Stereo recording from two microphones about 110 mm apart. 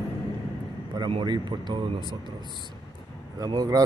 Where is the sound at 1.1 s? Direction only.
50° right (ahead or behind).